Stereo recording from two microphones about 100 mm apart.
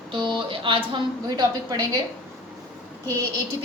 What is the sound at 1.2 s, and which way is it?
Speech, 45° right (ahead or behind).